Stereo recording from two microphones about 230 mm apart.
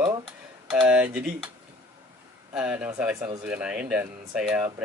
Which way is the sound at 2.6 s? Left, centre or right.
Centre.